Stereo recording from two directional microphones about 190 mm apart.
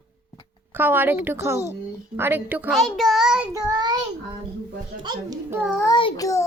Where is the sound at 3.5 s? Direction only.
20° right (ahead or behind).